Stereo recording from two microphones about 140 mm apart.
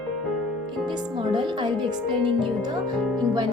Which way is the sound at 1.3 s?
35° right (ahead or behind).